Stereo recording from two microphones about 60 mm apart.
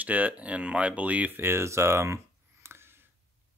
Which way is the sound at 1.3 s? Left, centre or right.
Right.